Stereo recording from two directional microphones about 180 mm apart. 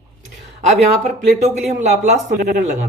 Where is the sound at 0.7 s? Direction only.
40° right (ahead or behind).